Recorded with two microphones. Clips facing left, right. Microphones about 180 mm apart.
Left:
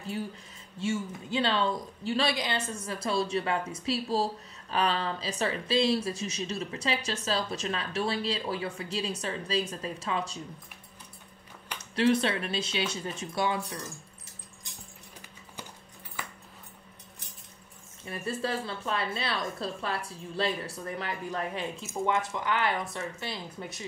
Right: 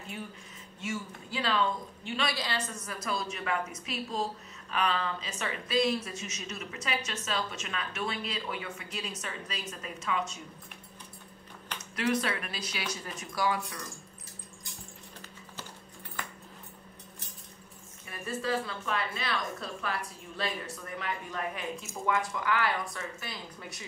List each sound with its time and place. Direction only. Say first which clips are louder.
0.7 s a woman's voice: left 6 dB; 30° left (ahead or behind)
2.3 s a woman's voice: left 3 dB; 20° left (ahead or behind)
11.8 s a woman's voice: left 5 dB; 30° left (ahead or behind)
18.0 s a woman's voice: left 2 dB; 30° left (ahead or behind)